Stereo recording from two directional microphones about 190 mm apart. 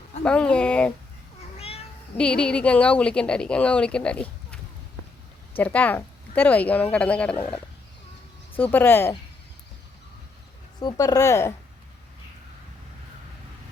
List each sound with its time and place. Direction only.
0.3 s a woman's voice: 5° left (ahead or behind)
1.5 s cat: 30° left (ahead or behind)
2.1 s a woman's voice: 5° left (ahead or behind)
8.5 s speech: 10° left (ahead or behind)
10.8 s speech: 20° left (ahead or behind)